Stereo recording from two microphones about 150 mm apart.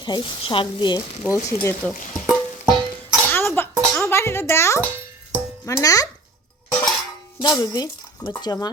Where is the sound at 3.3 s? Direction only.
15° left (ahead or behind).